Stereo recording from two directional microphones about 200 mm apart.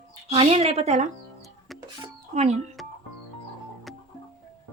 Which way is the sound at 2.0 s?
35° right (ahead or behind).